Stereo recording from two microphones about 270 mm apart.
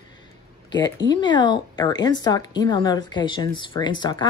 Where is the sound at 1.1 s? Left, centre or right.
Centre.